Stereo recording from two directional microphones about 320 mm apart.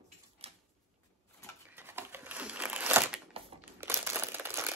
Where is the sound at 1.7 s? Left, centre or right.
Centre.